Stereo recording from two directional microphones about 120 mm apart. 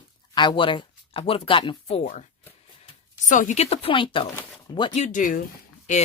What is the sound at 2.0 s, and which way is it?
Speech, 85° left.